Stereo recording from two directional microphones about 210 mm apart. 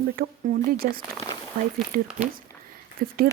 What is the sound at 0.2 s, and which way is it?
Speech, 40° right (ahead or behind).